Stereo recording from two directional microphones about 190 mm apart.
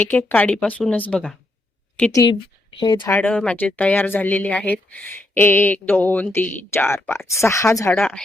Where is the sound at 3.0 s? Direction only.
10° left (ahead or behind).